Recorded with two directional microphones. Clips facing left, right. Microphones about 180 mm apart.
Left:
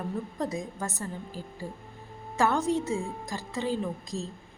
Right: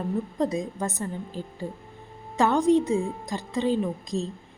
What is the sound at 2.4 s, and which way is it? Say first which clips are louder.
A woman's voice: right 6 dB; 15° right (ahead or behind).